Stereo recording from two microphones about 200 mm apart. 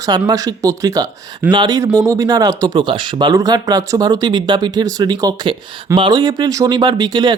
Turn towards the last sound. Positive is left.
turn(degrees=-20)  # may be behind; listen again after turning